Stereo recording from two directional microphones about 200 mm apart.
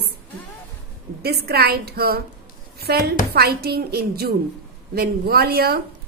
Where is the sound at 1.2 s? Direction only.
50° right (ahead or behind).